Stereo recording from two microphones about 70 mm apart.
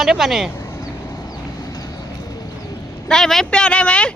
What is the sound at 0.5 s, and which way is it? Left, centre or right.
Clip-clop, left.